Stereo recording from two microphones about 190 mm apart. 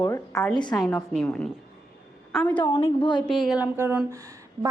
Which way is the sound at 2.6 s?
20° left (ahead or behind).